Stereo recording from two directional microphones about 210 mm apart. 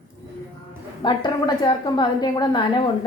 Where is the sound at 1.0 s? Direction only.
20° left (ahead or behind).